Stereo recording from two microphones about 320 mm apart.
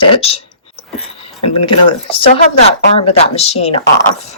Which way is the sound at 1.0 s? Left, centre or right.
Centre.